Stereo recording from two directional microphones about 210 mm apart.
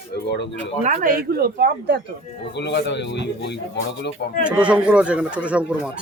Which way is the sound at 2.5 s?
55° left (ahead or behind).